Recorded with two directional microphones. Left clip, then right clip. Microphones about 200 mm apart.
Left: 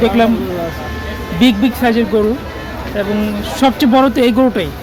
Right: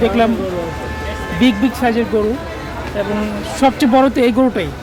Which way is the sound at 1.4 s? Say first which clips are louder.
Left 2 dB; 5° left (ahead or behind).